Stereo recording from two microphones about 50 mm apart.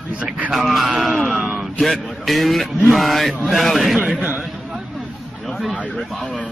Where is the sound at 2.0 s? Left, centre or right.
Centre.